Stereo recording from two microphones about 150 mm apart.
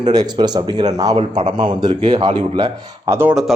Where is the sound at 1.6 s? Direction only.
30° right (ahead or behind).